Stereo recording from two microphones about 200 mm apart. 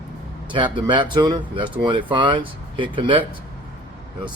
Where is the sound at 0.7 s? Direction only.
25° right (ahead or behind).